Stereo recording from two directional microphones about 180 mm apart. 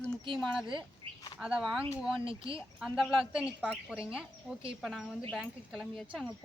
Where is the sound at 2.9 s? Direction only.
Centre (ahead or behind).